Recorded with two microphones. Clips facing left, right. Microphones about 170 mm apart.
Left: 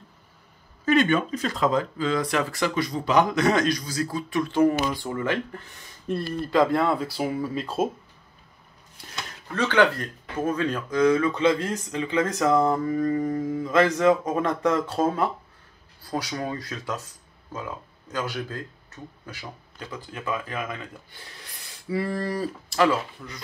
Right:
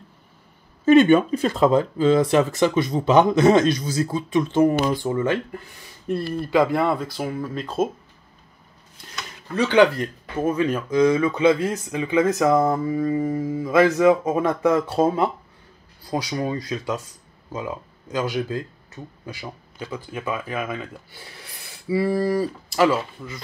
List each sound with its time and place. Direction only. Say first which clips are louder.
0.9 s speech: right 7 dB; 30° right (ahead or behind)
6.0 s speech: right 3 dB; centre (ahead or behind)
9.5 s speech: right 4 dB; 10° right (ahead or behind)